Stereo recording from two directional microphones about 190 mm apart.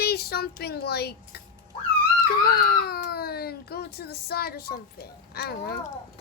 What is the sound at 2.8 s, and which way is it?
Speech, 55° left (ahead or behind).